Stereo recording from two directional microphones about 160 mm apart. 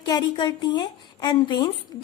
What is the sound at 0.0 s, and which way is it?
A woman's voice, 25° left (ahead or behind).